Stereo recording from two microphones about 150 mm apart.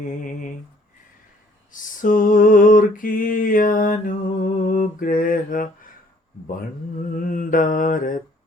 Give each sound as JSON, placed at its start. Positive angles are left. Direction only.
{"t": 0.0, "sound": "mantra", "side_deg": 60}
{"t": 1.7, "sound": "mantra", "side_deg": 60}
{"t": 7.3, "sound": "mantra", "side_deg": 65}